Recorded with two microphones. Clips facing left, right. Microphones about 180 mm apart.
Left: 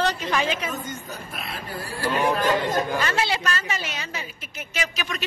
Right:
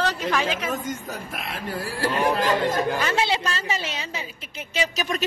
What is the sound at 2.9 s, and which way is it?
A woman's voice, 20° right (ahead or behind).